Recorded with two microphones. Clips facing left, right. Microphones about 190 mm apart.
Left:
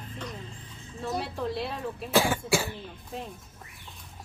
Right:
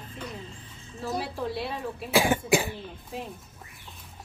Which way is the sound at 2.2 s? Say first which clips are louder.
Right 3 dB; 15° right (ahead or behind).